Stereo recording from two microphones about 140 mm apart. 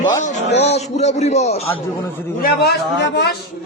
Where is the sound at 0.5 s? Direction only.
50° left (ahead or behind).